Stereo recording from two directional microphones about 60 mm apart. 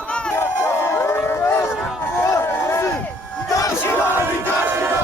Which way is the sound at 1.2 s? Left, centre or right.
Left.